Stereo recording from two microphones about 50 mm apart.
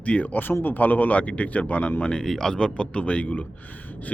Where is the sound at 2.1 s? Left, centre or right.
Centre.